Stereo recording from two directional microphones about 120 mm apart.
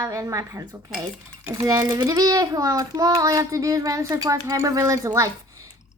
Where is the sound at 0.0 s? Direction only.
25° right (ahead or behind).